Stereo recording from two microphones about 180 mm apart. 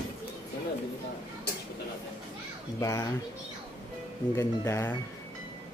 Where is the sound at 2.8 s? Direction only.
20° left (ahead or behind).